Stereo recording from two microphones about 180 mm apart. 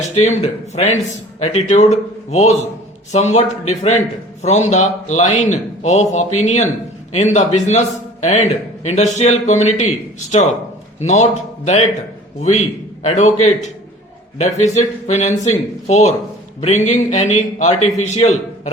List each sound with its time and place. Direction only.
0.2 s speech: 35° left (ahead or behind)